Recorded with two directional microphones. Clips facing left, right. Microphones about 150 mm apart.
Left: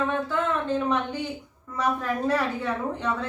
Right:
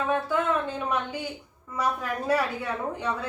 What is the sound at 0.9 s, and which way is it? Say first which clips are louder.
A woman's voice: left 3 dB; 10° right (ahead or behind).